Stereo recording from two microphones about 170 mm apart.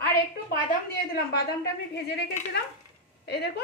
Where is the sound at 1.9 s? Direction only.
80° left.